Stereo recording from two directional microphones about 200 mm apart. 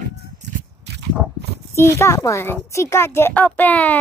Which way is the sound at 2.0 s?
15° left (ahead or behind).